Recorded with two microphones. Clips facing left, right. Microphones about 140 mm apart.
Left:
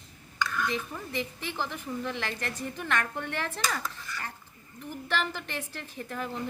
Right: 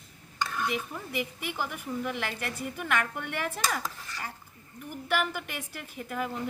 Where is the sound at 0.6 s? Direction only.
10° right (ahead or behind).